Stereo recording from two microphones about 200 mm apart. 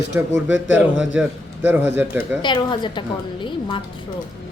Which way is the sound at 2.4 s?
25° left (ahead or behind).